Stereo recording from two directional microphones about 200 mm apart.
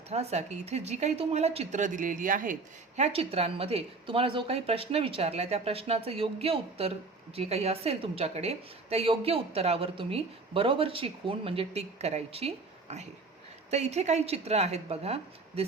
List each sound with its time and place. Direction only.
0.1 s a woman's voice: 35° right (ahead or behind)